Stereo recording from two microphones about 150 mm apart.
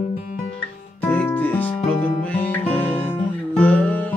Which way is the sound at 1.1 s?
10° left (ahead or behind).